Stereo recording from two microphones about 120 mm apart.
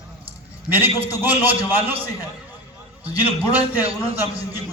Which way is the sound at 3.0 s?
15° right (ahead or behind).